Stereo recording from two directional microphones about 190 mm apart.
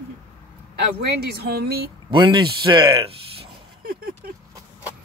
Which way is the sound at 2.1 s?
25° right (ahead or behind).